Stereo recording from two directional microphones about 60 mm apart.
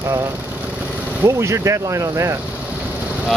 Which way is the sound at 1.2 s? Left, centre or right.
Right.